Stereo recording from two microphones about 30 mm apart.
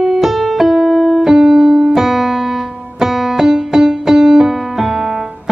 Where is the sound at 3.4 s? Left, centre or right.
Centre.